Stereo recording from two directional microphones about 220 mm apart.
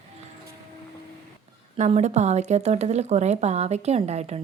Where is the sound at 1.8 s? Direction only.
30° right (ahead or behind).